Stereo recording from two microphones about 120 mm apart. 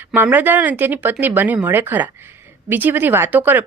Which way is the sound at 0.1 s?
15° right (ahead or behind).